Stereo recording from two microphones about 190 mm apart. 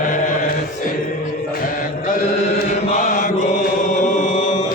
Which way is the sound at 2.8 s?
40° left (ahead or behind).